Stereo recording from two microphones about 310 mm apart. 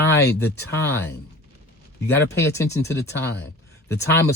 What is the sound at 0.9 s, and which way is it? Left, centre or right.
Speech, centre.